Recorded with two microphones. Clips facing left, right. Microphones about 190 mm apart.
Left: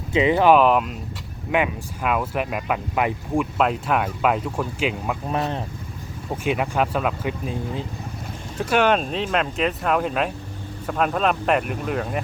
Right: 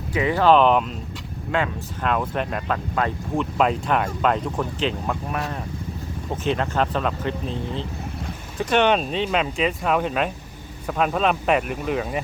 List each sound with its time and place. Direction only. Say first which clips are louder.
0.1 s speech: left 2 dB; 20° left (ahead or behind)
0.5 s speech: even; 5° left (ahead or behind)
6.3 s speech: left 1 dB; 10° left (ahead or behind)